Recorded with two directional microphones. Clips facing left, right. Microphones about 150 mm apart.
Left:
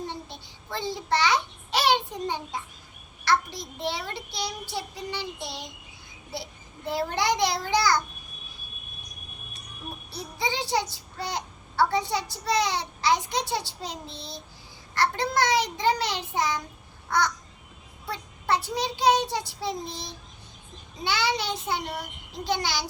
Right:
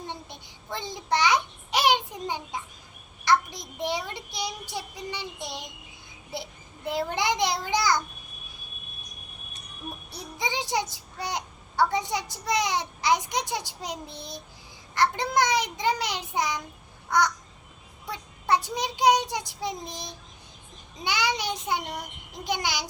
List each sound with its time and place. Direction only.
0.1 s babbling: 15° right (ahead or behind)
3.2 s child singing: 20° right (ahead or behind)
10.3 s a child's voice: 20° right (ahead or behind)
18.1 s a child's voice: 15° right (ahead or behind)